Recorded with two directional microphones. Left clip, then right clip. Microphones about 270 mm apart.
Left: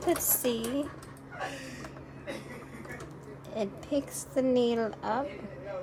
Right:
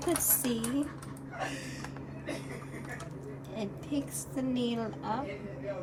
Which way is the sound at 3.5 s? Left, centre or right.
Centre.